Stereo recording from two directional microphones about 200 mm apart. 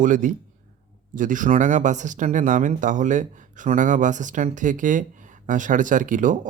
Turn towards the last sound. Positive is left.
turn(degrees=-40)  # may be behind; listen again after turning